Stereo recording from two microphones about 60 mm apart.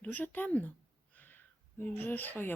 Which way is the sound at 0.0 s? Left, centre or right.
Left.